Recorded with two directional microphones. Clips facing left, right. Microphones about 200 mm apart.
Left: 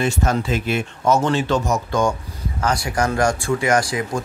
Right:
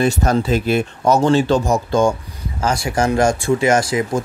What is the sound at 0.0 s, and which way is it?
Speech, 35° right (ahead or behind).